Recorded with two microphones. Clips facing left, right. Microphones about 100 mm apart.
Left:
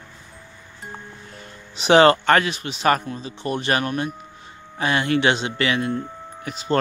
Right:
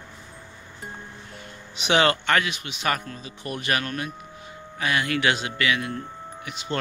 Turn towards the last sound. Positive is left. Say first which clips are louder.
# left 5 dB
turn(degrees=40)  # may be behind; listen again after turning